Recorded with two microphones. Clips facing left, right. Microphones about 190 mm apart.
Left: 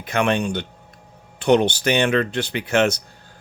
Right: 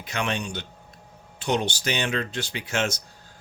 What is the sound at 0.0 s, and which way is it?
Speech, 55° left (ahead or behind).